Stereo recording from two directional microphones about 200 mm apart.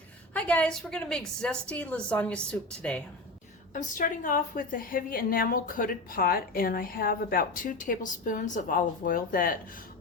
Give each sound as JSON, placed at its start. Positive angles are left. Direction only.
{"t": 0.3, "sound": "a woman's voice", "side_deg": 5}
{"t": 3.7, "sound": "a woman's voice", "side_deg": 40}